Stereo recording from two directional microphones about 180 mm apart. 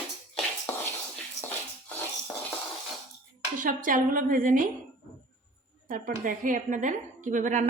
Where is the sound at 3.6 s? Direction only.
50° right (ahead or behind).